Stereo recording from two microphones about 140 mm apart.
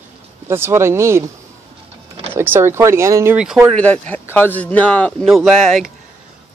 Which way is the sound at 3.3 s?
5° right (ahead or behind).